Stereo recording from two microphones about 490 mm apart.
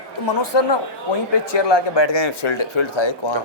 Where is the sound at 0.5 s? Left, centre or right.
Left.